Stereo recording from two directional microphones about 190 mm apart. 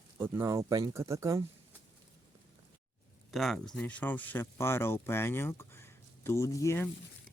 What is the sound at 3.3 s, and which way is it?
Speech, centre (ahead or behind).